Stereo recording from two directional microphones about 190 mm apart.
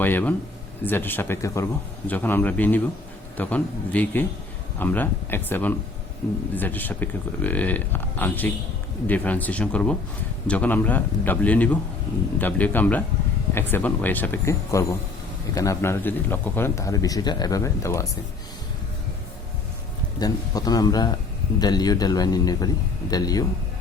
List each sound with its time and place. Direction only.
0.0 s speech: 10° left (ahead or behind)
20.1 s speech: 20° left (ahead or behind)